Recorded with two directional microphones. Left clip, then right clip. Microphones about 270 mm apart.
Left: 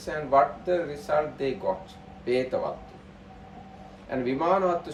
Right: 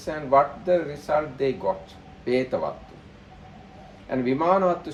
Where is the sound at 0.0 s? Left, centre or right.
Right.